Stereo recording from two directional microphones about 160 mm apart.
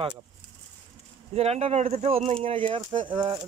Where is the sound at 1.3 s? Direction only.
40° right (ahead or behind).